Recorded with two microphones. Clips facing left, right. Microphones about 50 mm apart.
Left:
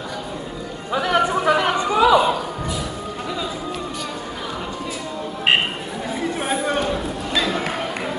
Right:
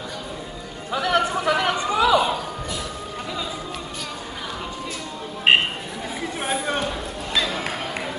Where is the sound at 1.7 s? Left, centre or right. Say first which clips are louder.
Left 4 dB; centre.